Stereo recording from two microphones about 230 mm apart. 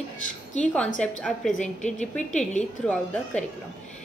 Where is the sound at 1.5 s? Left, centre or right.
Left.